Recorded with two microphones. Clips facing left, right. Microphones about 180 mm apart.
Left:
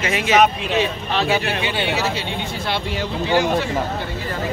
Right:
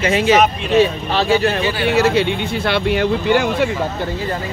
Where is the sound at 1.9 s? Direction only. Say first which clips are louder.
Right 8 dB; 60° right (ahead or behind).